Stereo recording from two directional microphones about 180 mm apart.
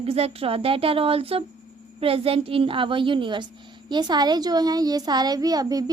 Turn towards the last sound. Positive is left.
turn(degrees=-20)  # may be behind; listen again after turning